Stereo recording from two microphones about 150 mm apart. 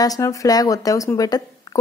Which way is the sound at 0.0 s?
20° left (ahead or behind).